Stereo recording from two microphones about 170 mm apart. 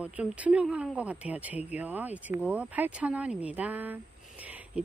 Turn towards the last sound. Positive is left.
turn(degrees=-10)  # may be behind; listen again after turning